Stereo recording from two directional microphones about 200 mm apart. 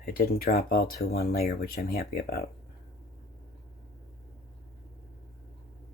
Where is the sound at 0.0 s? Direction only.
45° left (ahead or behind).